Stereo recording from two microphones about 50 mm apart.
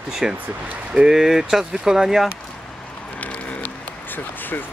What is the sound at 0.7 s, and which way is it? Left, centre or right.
Speech, right.